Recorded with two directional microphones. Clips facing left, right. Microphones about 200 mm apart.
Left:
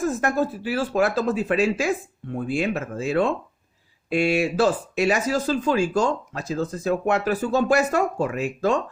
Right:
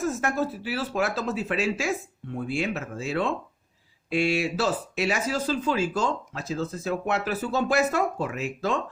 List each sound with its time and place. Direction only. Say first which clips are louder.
0.2 s speech: left 4 dB; 50° left (ahead or behind)